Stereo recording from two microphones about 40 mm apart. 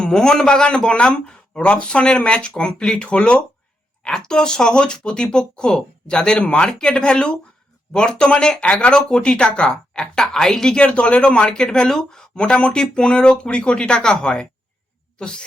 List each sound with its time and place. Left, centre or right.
0.0 s speech: centre
4.1 s speech: centre
6.7 s a woman's voice: centre
10.2 s a woman's voice: centre
10.8 s speech: left